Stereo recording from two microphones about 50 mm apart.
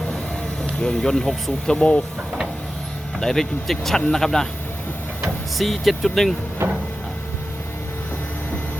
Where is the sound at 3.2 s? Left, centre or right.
Centre.